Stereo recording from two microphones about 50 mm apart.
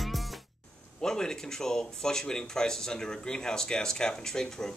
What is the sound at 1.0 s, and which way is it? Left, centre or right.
Speech, centre.